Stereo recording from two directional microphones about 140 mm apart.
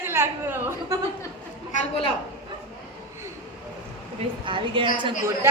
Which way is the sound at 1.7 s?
60° left (ahead or behind).